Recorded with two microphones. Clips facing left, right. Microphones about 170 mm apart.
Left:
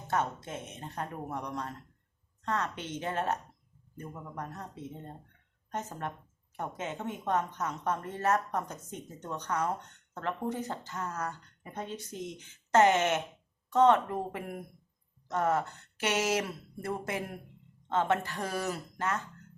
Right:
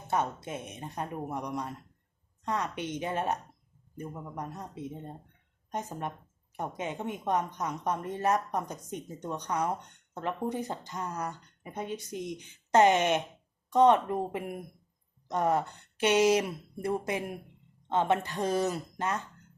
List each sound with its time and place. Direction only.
0.1 s a woman's voice: 10° right (ahead or behind)